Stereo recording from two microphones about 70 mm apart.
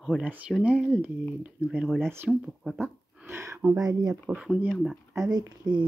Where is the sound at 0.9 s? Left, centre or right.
Right.